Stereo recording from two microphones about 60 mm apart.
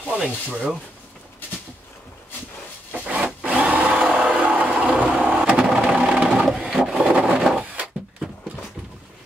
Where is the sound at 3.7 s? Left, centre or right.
Centre.